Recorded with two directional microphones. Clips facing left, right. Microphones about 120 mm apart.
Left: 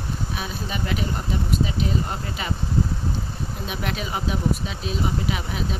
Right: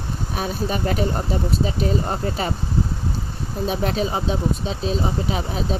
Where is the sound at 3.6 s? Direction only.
35° right (ahead or behind).